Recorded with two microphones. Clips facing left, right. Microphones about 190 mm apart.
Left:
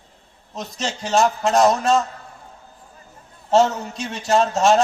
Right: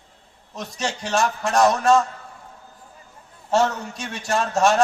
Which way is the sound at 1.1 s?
20° left (ahead or behind).